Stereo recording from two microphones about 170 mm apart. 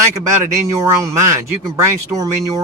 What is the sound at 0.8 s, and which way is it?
Speech, 20° right (ahead or behind).